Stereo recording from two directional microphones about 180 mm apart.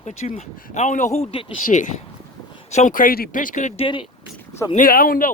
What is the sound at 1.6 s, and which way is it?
Speech, 45° left (ahead or behind).